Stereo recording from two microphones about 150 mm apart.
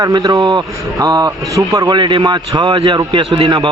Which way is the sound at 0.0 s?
25° right (ahead or behind).